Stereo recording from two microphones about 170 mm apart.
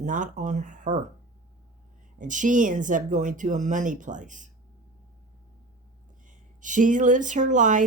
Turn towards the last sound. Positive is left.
turn(degrees=-50)  # may be behind; listen again after turning